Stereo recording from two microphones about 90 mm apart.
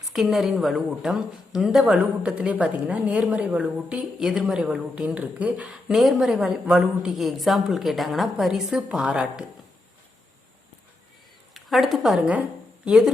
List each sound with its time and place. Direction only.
0.1 s a man's voice: centre (ahead or behind)
4.2 s a woman's voice: 5° right (ahead or behind)
5.9 s a man's voice: centre (ahead or behind)
11.5 s speech: centre (ahead or behind)